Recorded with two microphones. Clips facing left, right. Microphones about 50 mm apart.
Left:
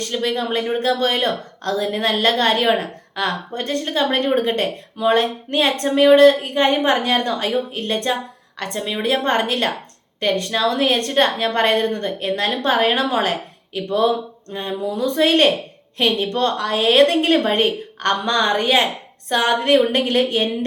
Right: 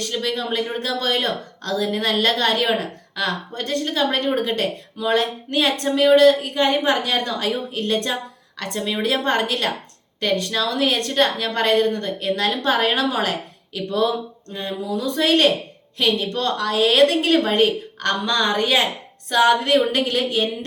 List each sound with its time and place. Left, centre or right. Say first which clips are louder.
0.0 s speech: left 3 dB; centre